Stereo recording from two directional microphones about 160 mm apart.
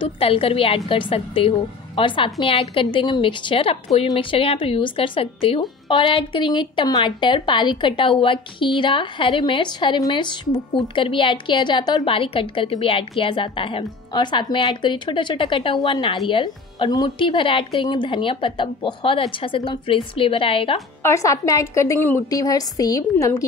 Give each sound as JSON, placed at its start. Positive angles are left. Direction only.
{"t": 0.0, "sound": "a woman's voice", "side_deg": 35}
{"t": 21.0, "sound": "speech", "side_deg": 20}